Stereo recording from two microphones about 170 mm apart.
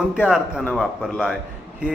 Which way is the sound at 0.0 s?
5° right (ahead or behind).